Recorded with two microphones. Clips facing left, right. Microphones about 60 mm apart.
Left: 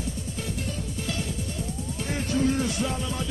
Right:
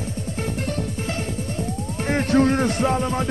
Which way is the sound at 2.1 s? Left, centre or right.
Right.